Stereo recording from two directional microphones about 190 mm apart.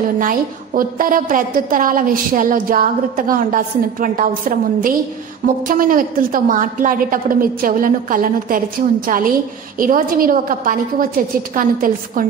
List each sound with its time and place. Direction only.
0.2 s a woman's voice: 45° right (ahead or behind)